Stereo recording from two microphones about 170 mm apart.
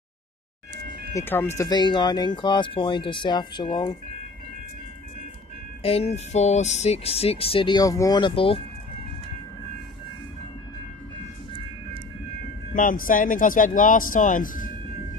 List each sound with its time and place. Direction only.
1.1 s speech: 10° left (ahead or behind)
1.6 s speech: 25° left (ahead or behind)
5.8 s speech: 35° left (ahead or behind)
12.7 s speech: 55° left (ahead or behind)